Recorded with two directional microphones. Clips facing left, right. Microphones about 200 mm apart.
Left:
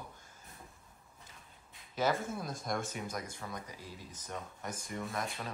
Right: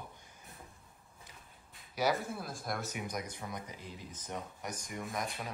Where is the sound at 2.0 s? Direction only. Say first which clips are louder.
Even; 10° right (ahead or behind).